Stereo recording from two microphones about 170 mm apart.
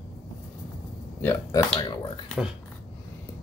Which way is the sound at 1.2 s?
15° left (ahead or behind).